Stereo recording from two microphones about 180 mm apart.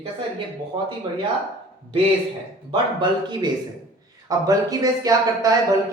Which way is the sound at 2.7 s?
25° right (ahead or behind).